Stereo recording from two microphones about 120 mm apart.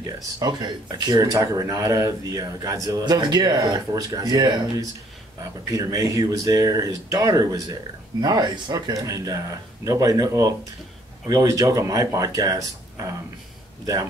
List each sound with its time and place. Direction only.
0.0 s speech: 35° right (ahead or behind)